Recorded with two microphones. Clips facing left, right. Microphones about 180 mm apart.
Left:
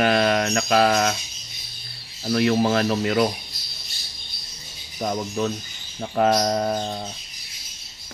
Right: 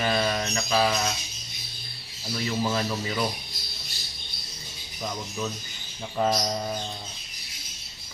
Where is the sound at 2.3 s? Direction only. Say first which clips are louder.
Left 8 dB; 65° left (ahead or behind).